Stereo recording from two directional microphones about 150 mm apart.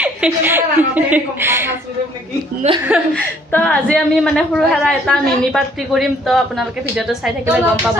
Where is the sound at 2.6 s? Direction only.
45° right (ahead or behind).